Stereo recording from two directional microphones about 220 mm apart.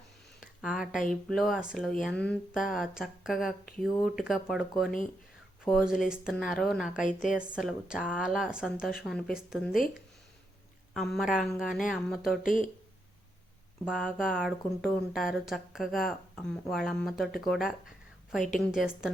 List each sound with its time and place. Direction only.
0.3 s speech: centre (ahead or behind)
5.6 s speech: centre (ahead or behind)
10.9 s speech: centre (ahead or behind)
12.4 s speech: 35° left (ahead or behind)
13.8 s speech: centre (ahead or behind)